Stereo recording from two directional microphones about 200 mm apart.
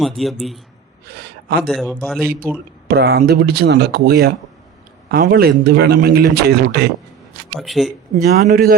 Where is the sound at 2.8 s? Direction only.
55° right (ahead or behind).